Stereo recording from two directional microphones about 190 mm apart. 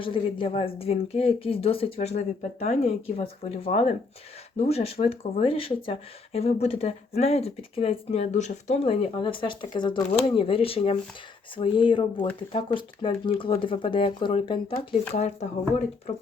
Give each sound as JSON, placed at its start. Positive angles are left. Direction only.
{"t": 0.0, "sound": "speech", "side_deg": 25}